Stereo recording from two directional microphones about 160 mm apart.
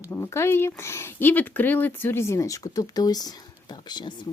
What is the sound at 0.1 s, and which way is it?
Speech, 15° left (ahead or behind).